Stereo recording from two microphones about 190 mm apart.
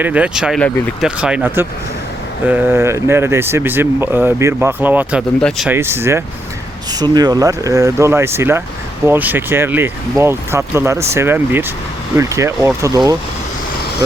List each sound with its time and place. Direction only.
0.0 s speech: 5° right (ahead or behind)
5.4 s speech: 5° left (ahead or behind)
5.6 s speech: 10° right (ahead or behind)